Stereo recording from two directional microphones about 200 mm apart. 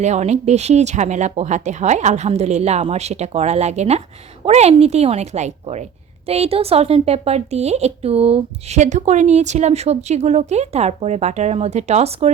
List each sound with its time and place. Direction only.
0.0 s a woman's voice: 35° right (ahead or behind)